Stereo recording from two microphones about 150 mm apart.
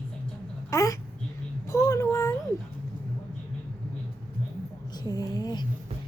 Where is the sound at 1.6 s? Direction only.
20° left (ahead or behind).